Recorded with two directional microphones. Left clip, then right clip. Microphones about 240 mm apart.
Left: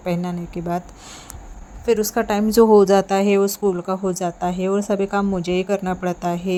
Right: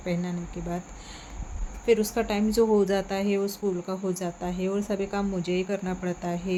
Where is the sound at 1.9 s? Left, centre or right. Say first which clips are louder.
Left 5 dB; left.